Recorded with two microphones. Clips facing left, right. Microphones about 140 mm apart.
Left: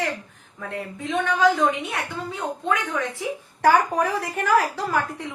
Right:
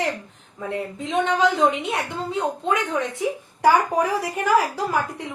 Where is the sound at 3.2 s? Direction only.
15° right (ahead or behind).